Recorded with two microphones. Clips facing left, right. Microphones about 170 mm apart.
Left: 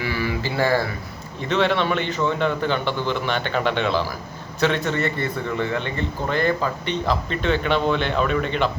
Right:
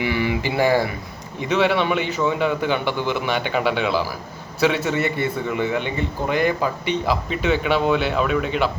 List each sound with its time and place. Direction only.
0.0 s a man's voice: 20° right (ahead or behind)